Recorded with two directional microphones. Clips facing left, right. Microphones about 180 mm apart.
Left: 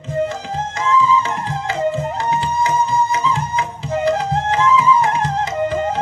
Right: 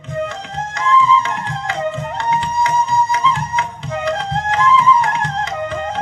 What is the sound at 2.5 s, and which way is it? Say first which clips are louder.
Music: even; 5° left (ahead or behind).